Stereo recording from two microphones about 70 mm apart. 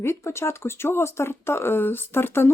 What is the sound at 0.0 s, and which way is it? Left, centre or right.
Speech, left.